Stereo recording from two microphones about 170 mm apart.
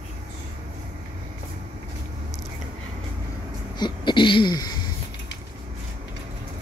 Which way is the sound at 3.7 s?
25° left (ahead or behind).